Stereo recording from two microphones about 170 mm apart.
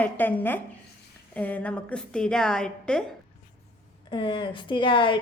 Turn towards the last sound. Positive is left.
turn(degrees=30)  # may be behind; listen again after turning